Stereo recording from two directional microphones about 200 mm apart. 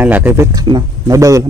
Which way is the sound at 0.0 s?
10° right (ahead or behind).